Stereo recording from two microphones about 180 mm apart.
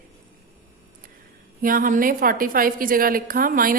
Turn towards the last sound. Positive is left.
turn(degrees=-50)  # may be behind; listen again after turning